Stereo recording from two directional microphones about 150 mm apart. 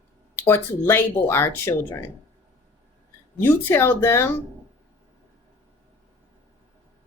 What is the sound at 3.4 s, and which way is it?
Speech, 15° left (ahead or behind).